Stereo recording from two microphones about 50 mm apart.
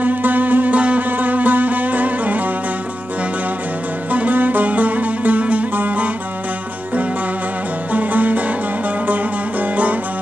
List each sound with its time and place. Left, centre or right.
0.0 s music: right
4.1 s music: right
7.9 s music: right